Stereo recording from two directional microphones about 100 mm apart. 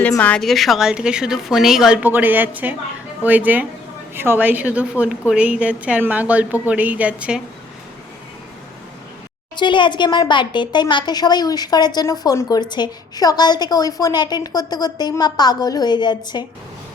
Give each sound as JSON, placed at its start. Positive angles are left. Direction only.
{"t": 0.2, "sound": "a woman's voice", "side_deg": 15}
{"t": 0.4, "sound": "a woman's voice", "side_deg": 0}
{"t": 2.0, "sound": "a woman's voice", "side_deg": -20}
{"t": 9.6, "sound": "a woman's voice", "side_deg": 50}